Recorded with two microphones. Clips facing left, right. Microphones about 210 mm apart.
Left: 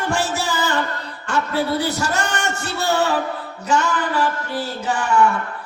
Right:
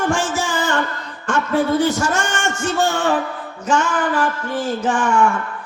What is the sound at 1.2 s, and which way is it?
A man's voice, 35° left (ahead or behind).